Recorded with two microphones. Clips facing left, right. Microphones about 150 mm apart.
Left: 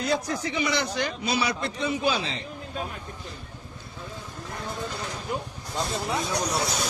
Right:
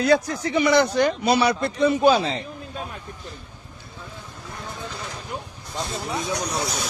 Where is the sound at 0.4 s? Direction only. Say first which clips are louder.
Right 8 dB; 50° right (ahead or behind).